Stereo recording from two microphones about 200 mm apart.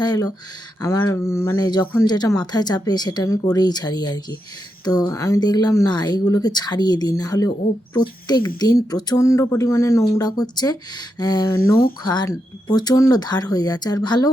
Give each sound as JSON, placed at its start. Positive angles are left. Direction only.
{"t": 0.0, "sound": "speech", "side_deg": 20}